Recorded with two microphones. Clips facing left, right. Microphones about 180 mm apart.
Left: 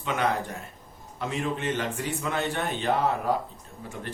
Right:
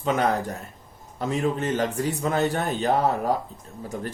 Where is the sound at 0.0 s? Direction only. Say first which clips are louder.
Right 4 dB; 40° right (ahead or behind).